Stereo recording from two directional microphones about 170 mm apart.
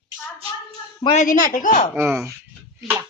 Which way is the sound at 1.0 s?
45° left (ahead or behind).